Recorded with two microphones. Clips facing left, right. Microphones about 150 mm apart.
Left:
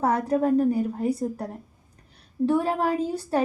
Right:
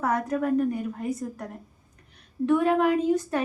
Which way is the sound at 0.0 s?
30° left (ahead or behind).